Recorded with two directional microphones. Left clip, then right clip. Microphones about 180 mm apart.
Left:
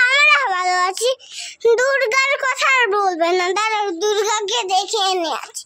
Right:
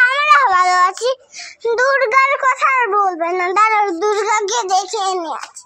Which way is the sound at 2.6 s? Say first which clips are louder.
Left 2 dB; 20° left (ahead or behind).